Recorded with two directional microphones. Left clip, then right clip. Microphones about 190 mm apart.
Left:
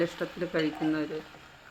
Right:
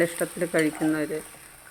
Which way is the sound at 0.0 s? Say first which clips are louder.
Right 5 dB; 25° right (ahead or behind).